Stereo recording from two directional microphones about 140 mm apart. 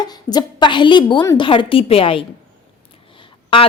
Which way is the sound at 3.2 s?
40° left (ahead or behind).